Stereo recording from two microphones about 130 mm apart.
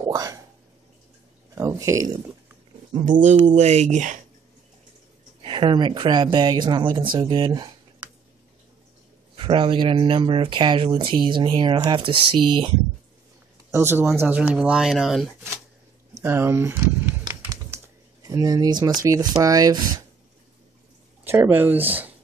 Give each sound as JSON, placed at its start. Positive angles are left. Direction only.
{"t": 0.0, "sound": "a sound", "side_deg": -30}
{"t": 1.5, "sound": "speech", "side_deg": -25}
{"t": 3.1, "sound": "speech", "side_deg": -75}
{"t": 3.4, "sound": "speech", "side_deg": -60}
{"t": 5.4, "sound": "speech", "side_deg": -40}
{"t": 9.3, "sound": "speech", "side_deg": -45}
{"t": 13.7, "sound": "speech", "side_deg": -15}
{"t": 16.2, "sound": "speech", "side_deg": -20}
{"t": 17.3, "sound": "typing", "side_deg": -20}
{"t": 19.0, "sound": "speech", "side_deg": -25}
{"t": 21.2, "sound": "speech", "side_deg": -15}